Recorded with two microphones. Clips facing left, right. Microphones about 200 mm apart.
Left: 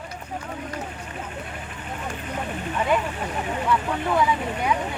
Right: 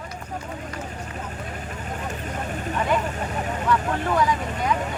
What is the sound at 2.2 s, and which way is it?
Vehicle, 40° right (ahead or behind).